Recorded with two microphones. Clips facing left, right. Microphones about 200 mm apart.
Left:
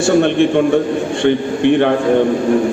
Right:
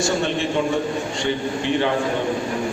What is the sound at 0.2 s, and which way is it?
A man's voice, 55° left (ahead or behind).